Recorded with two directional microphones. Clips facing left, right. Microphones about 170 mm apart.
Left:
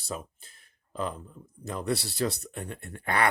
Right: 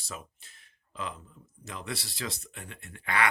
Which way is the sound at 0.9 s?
45° left (ahead or behind).